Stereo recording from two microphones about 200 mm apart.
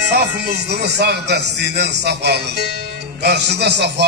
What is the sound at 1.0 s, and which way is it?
A man's voice, 55° right (ahead or behind).